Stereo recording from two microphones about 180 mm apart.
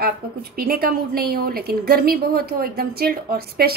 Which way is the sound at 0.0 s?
60° right (ahead or behind).